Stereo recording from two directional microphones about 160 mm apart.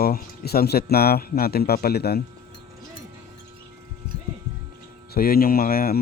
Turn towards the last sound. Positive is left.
turn(degrees=65)  # may be behind; listen again after turning